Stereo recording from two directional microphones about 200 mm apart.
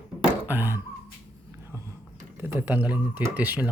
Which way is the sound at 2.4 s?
10° right (ahead or behind).